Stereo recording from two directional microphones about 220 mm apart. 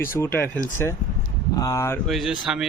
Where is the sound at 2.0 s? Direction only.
Centre (ahead or behind).